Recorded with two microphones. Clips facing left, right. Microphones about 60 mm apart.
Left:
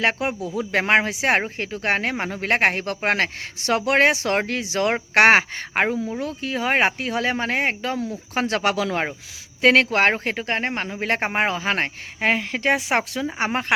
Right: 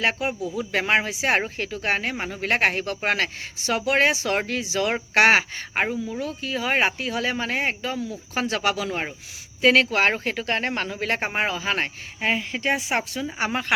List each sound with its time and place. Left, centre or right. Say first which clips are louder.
0.4 s speech: left 3 dB; left
3.6 s speech: left 3 dB; left
9.6 s speech: left 2 dB; left
11.1 s speech: left 4 dB; left